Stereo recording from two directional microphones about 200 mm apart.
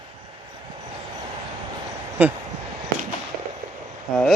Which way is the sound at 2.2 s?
10° right (ahead or behind).